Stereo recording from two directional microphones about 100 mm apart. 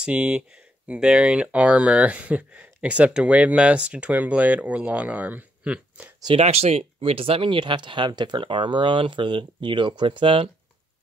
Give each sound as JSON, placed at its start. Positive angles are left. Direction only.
{"t": 0.0, "sound": "speech", "side_deg": -10}
{"t": 6.3, "sound": "speech", "side_deg": -90}